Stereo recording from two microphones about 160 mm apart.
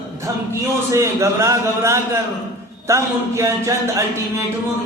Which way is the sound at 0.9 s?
20° right (ahead or behind).